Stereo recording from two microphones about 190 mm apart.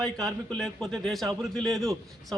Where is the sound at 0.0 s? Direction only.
Centre (ahead or behind).